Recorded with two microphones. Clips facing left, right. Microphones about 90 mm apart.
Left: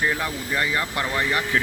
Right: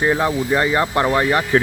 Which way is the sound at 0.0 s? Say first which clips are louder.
Right 8 dB; 30° right (ahead or behind).